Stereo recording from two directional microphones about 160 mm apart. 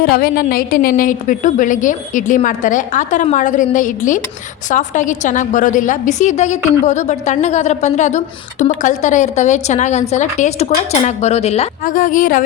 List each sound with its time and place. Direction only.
0.0 s a woman's voice: 70° left (ahead or behind); by 11.7 s 40° left (ahead or behind)
11.8 s a woman's voice: 60° left (ahead or behind)